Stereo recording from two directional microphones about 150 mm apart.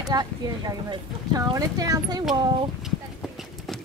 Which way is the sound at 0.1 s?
25° right (ahead or behind).